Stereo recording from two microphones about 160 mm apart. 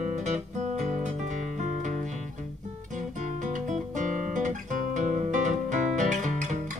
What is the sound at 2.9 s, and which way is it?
Guitar, 50° right (ahead or behind).